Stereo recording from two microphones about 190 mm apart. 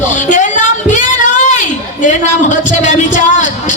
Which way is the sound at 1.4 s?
40° left (ahead or behind).